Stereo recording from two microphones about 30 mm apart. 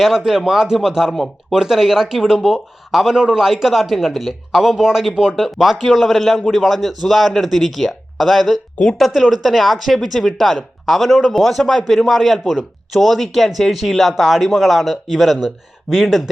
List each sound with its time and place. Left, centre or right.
0.0 s speech: centre
1.1 s speech: centre
1.5 s speech: centre
3.1 s a man's voice: right
3.4 s speech: centre
4.8 s a man's voice: centre
6.5 s speech: centre